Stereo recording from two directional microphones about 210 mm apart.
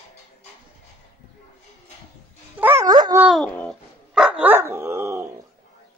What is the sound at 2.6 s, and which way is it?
Dog, 10° right (ahead or behind).